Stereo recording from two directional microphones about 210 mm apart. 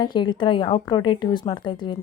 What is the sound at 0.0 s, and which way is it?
A woman's voice, 20° left (ahead or behind).